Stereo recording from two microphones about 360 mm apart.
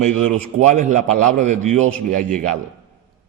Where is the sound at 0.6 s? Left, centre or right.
Centre.